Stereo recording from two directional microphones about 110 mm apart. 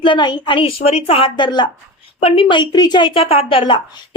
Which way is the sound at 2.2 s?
55° left (ahead or behind).